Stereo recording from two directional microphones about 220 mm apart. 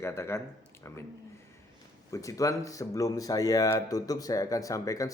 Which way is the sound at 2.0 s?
15° left (ahead or behind).